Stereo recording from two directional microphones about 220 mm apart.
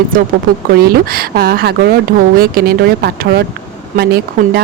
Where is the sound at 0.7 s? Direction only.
45° right (ahead or behind).